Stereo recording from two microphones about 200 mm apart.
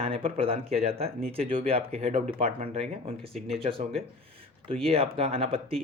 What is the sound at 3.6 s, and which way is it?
Speech, 30° right (ahead or behind).